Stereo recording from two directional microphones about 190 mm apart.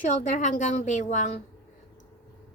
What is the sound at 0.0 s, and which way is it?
A woman's voice, 40° left (ahead or behind).